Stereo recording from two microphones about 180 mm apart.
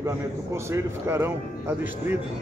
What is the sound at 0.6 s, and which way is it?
A man's voice, 15° right (ahead or behind).